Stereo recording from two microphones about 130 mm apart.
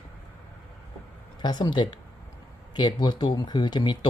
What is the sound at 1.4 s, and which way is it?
Speech, 35° left (ahead or behind).